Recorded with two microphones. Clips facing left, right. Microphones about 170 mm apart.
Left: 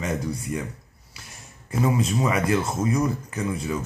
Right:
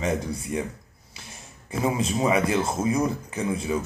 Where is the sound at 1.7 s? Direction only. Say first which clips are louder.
Left 2 dB; 25° right (ahead or behind).